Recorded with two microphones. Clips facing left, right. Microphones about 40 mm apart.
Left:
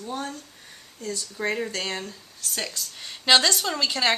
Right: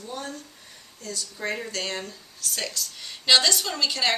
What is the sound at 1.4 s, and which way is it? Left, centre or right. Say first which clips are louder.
A woman's voice: left 3 dB; centre.